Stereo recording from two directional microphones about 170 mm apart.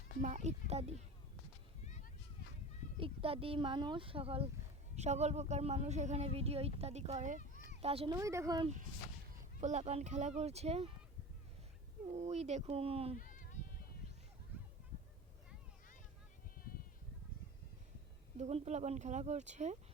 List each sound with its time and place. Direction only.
0.2 s speech: 45° right (ahead or behind)
3.0 s speech: 35° right (ahead or behind)
7.8 s speech: 35° right (ahead or behind)
8.1 s speech: 15° right (ahead or behind)
9.6 s speech: 40° right (ahead or behind)
12.1 s speech: 40° right (ahead or behind)
13.1 s a sound: 55° left (ahead or behind)
18.3 s speech: 40° right (ahead or behind)